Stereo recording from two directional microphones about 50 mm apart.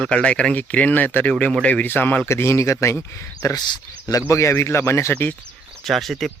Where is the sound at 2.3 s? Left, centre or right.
Left.